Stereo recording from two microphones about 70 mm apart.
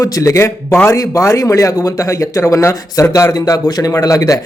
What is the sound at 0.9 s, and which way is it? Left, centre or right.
Speech, left.